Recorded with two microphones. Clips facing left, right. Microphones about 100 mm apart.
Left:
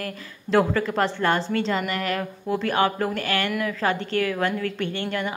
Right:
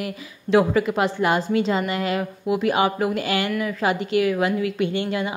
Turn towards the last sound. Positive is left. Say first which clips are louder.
# right 3 dB
turn(degrees=-15)  # may be behind; listen again after turning